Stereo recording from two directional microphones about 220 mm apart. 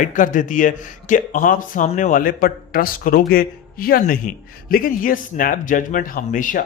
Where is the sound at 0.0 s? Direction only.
35° left (ahead or behind).